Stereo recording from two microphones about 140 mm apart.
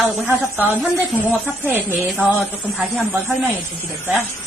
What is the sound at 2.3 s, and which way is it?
Speech, centre (ahead or behind).